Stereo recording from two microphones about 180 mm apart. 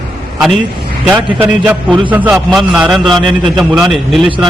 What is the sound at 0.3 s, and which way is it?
A man's voice, centre (ahead or behind).